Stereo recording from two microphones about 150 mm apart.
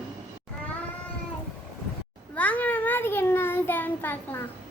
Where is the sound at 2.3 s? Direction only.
10° left (ahead or behind).